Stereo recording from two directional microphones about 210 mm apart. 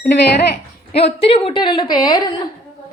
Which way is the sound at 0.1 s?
55° left (ahead or behind).